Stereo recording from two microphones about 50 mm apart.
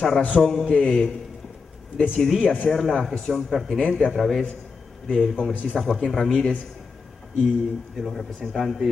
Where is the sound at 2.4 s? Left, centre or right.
Left.